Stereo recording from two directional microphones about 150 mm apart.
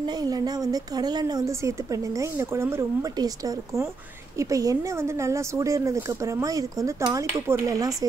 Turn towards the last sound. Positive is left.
turn(degrees=-20)  # may be behind; listen again after turning